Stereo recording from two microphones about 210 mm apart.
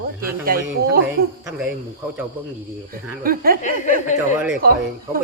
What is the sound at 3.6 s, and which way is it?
Speech, 35° left (ahead or behind).